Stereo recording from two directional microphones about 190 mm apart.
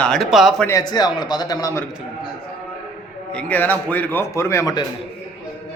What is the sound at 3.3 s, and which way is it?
A man's voice, 10° left (ahead or behind).